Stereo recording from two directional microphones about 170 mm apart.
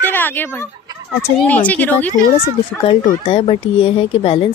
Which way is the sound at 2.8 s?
35° left (ahead or behind).